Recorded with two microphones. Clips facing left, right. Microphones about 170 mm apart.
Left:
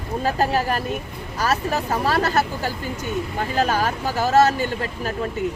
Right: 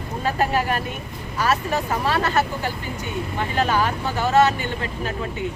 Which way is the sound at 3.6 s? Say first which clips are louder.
Even; 40° left (ahead or behind).